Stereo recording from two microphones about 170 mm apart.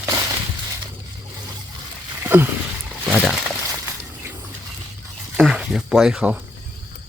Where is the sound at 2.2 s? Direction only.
10° right (ahead or behind).